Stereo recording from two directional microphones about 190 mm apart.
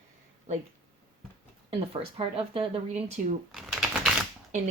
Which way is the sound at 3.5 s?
Centre (ahead or behind).